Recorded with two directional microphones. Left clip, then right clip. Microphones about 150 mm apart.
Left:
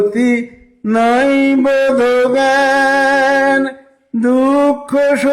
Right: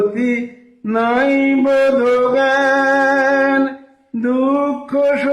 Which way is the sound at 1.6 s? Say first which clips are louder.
Right 1 dB; 35° left (ahead or behind).